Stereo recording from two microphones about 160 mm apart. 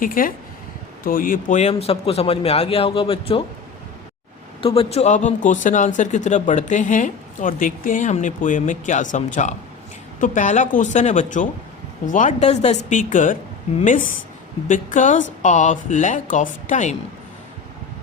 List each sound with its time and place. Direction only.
0.0 s a man's voice: 60° left (ahead or behind); by 3.4 s 35° left (ahead or behind)
4.6 s speech: 35° left (ahead or behind); by 16.9 s 50° left (ahead or behind)